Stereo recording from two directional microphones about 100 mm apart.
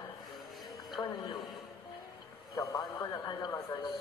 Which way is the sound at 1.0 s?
15° left (ahead or behind).